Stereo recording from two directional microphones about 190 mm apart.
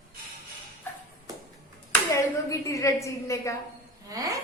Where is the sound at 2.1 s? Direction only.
15° left (ahead or behind).